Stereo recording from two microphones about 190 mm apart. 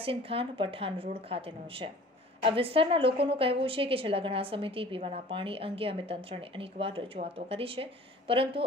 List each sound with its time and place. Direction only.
0.0 s a woman's voice: 30° right (ahead or behind)